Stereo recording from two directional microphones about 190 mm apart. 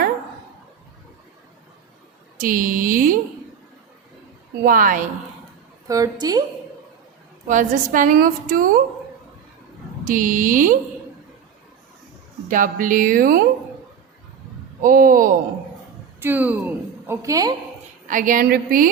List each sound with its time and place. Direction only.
2.4 s a woman's voice: 45° right (ahead or behind)
4.6 s a woman's voice: 45° right (ahead or behind)
5.9 s a woman's voice: 20° right (ahead or behind)
7.4 s a woman's voice: 40° right (ahead or behind)
10.0 s a woman's voice: 45° right (ahead or behind)
12.5 s a woman's voice: 45° right (ahead or behind)
14.8 s a woman's voice: 45° right (ahead or behind)
16.2 s a woman's voice: 10° right (ahead or behind)
18.1 s a woman's voice: 45° right (ahead or behind)